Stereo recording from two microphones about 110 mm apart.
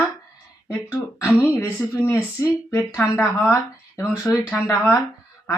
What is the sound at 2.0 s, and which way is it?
Speech, 25° left (ahead or behind).